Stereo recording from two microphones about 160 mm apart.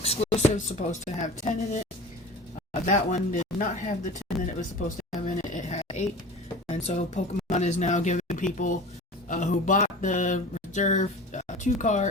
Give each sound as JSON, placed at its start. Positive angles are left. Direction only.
{"t": 0.0, "sound": "speech", "side_deg": 40}
{"t": 2.8, "sound": "speech", "side_deg": 50}
{"t": 4.9, "sound": "a sound", "side_deg": 50}
{"t": 6.7, "sound": "speech", "side_deg": 45}